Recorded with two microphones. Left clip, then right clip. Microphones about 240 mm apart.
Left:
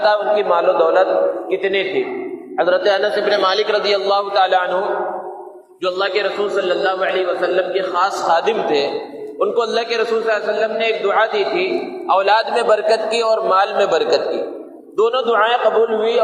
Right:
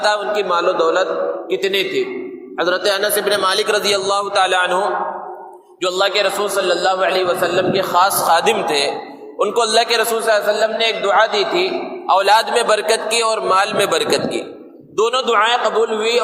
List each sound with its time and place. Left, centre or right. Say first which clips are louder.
0.0 s a man's voice: left 2 dB; right
5.8 s a man's voice: right 2 dB; right